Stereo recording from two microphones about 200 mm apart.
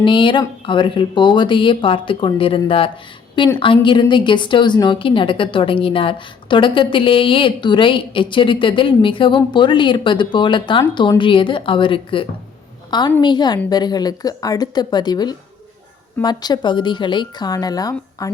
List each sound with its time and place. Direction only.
0.0 s a woman's voice: 25° left (ahead or behind)